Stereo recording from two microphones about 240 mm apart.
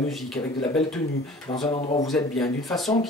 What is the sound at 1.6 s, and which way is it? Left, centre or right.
Speech, left.